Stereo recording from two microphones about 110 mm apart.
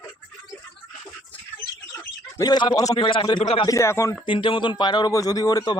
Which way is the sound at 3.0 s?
50° left (ahead or behind).